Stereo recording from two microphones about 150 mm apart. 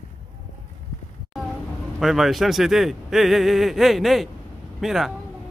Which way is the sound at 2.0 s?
Centre (ahead or behind).